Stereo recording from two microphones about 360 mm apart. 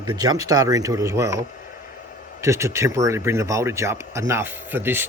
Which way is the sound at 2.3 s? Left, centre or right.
Centre.